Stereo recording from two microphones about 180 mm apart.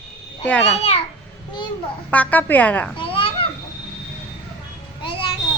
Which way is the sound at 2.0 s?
10° left (ahead or behind).